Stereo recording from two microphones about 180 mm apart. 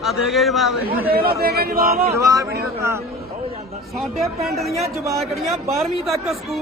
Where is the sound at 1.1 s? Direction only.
60° right (ahead or behind).